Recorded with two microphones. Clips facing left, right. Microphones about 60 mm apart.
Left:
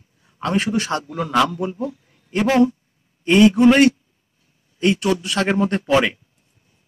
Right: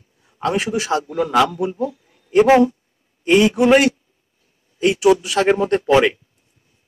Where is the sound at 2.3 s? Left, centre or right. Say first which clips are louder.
Right 5 dB; centre.